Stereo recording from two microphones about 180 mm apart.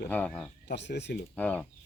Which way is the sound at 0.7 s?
75° left (ahead or behind).